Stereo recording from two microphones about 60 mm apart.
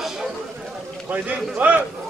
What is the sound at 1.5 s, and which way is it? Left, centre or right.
Speech, right.